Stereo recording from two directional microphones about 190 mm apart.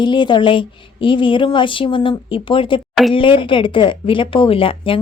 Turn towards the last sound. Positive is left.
turn(degrees=25)  # may be behind; listen again after turning